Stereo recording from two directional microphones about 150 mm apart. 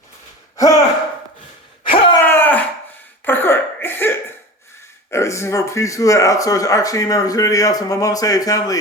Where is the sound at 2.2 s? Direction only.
15° left (ahead or behind).